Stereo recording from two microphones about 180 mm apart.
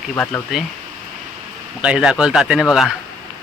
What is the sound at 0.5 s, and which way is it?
Speech, centre (ahead or behind).